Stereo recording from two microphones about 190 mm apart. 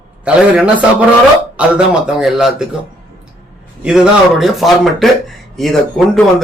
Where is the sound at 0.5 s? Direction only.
5° right (ahead or behind).